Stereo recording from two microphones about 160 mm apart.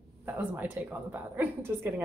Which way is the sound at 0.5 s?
10° right (ahead or behind).